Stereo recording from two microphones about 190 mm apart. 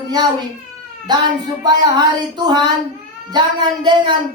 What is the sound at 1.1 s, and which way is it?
A woman's voice, 20° right (ahead or behind).